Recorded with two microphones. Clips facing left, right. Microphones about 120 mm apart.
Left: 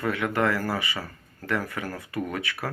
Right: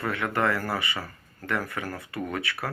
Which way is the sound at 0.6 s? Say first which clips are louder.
Left 1 dB; 25° right (ahead or behind).